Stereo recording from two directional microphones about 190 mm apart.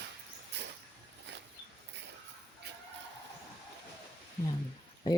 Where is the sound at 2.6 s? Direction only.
60° right (ahead or behind).